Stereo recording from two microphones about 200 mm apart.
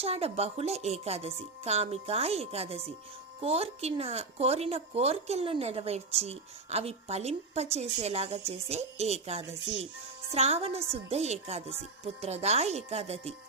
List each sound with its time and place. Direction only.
0.0 s speech: 30° right (ahead or behind)